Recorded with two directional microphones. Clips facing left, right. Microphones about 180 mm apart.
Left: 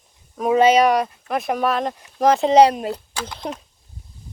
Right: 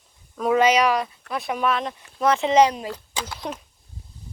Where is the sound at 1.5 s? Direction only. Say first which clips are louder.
Left 2 dB; 40° left (ahead or behind).